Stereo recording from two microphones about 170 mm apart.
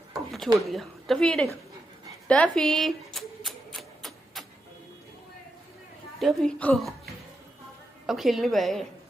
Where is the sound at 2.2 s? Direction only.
5° left (ahead or behind).